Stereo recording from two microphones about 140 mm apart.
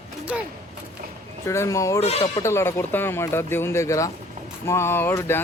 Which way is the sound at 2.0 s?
50° left (ahead or behind).